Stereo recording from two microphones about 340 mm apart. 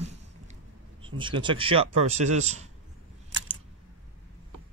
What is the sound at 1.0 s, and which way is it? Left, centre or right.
A man's voice, centre.